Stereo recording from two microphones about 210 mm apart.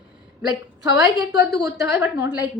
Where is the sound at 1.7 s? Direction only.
55° left (ahead or behind).